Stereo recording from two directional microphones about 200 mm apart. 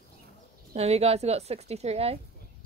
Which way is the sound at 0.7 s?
30° right (ahead or behind).